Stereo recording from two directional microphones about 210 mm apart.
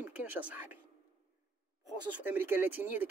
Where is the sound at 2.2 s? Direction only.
10° right (ahead or behind).